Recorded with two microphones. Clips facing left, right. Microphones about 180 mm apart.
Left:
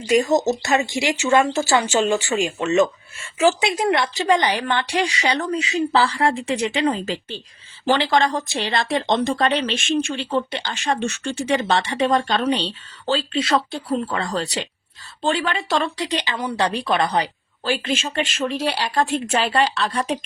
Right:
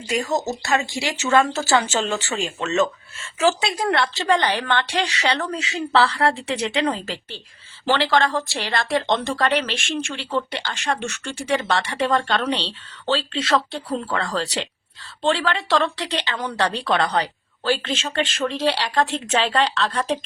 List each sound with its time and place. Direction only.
0.1 s speech: 20° left (ahead or behind)
12.4 s speech: 10° left (ahead or behind)